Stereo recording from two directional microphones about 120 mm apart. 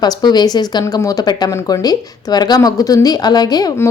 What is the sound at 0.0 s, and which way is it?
Speech, 35° left (ahead or behind).